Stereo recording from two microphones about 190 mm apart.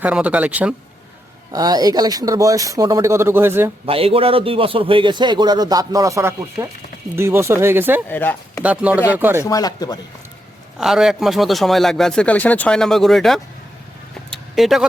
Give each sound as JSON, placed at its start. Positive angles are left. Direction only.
{"t": 0.0, "sound": "speech", "side_deg": -5}
{"t": 1.5, "sound": "speech", "side_deg": -20}
{"t": 3.8, "sound": "a man's voice", "side_deg": -30}
{"t": 8.1, "sound": "speech", "side_deg": 10}
{"t": 8.6, "sound": "speech", "side_deg": -5}
{"t": 9.4, "sound": "chopping", "side_deg": 20}
{"t": 10.8, "sound": "speech", "side_deg": -5}
{"t": 14.3, "sound": "vehicle", "side_deg": 0}